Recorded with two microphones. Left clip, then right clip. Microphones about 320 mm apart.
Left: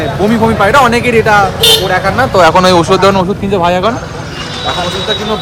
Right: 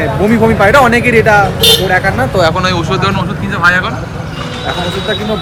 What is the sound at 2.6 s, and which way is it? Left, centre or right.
Speech, centre.